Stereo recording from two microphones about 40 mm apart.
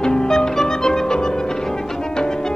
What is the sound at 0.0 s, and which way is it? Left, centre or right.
Music, centre.